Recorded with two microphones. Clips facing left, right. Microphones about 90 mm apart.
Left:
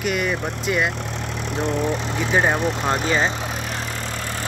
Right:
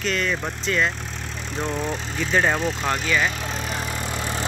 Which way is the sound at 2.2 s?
15° left (ahead or behind).